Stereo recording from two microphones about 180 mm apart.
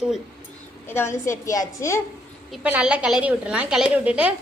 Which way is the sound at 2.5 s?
5° right (ahead or behind).